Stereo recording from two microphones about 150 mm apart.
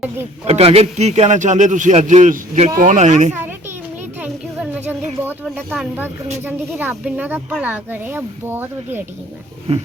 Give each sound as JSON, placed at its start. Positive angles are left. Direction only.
{"t": 0.4, "sound": "a man's voice", "side_deg": -40}
{"t": 5.7, "sound": "speech", "side_deg": -5}
{"t": 9.7, "sound": "a man's voice", "side_deg": -45}